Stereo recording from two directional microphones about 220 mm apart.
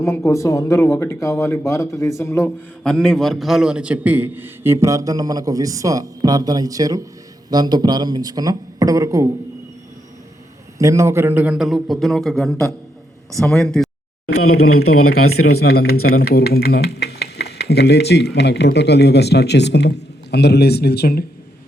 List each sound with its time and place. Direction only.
0.0 s a man's voice: 15° left (ahead or behind); by 9.3 s 15° right (ahead or behind)
10.8 s speech: 15° right (ahead or behind); by 13.9 s 5° left (ahead or behind)
14.3 s speech: 80° left
15.5 s speech: 45° left (ahead or behind)